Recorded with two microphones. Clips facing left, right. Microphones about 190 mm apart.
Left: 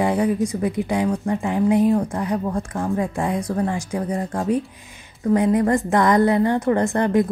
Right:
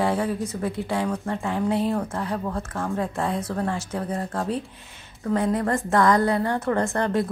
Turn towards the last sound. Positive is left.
turn(degrees=15)  # may be behind; listen again after turning